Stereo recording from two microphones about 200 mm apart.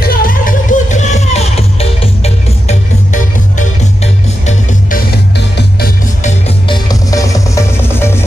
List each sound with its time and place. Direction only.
0.0 s music: 45° left (ahead or behind)
5.1 s music: 50° left (ahead or behind)
6.7 s music: 20° left (ahead or behind)